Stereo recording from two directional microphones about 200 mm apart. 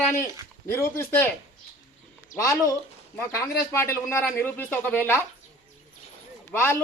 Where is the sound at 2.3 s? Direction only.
15° left (ahead or behind).